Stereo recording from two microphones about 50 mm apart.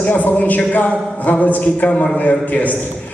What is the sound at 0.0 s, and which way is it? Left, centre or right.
A man's voice, left.